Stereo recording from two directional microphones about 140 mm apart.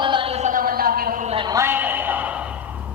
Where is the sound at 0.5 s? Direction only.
90° right.